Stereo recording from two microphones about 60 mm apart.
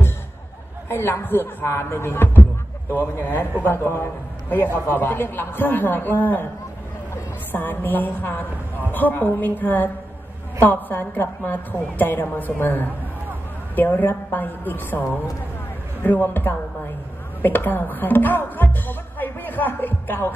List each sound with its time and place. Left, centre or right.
0.8 s a man's voice: left
7.5 s a man's voice: left
17.4 s music: left